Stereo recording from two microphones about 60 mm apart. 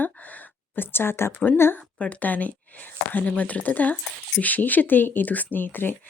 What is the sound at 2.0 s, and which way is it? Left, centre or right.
Speech, left.